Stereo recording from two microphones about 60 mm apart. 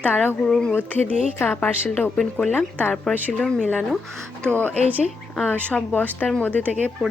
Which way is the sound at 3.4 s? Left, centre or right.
Centre.